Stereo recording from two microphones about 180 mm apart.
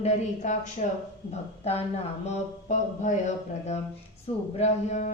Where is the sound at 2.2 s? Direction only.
40° left (ahead or behind).